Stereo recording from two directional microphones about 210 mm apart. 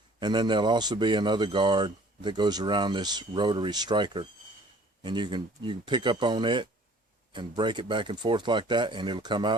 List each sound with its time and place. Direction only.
0.2 s speech: 20° right (ahead or behind)